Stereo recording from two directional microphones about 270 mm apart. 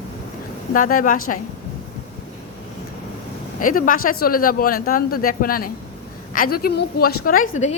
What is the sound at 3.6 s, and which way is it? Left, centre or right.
A man's voice, left.